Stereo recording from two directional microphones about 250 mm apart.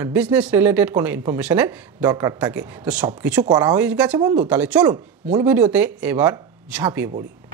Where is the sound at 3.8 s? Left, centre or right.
Centre.